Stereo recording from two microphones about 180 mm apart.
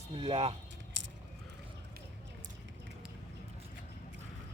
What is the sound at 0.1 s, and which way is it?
Speech, 35° right (ahead or behind).